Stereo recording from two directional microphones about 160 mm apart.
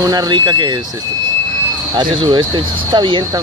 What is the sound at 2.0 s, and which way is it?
Speech, 30° right (ahead or behind).